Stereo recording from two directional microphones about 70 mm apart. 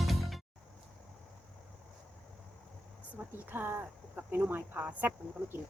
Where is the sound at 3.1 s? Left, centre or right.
Right.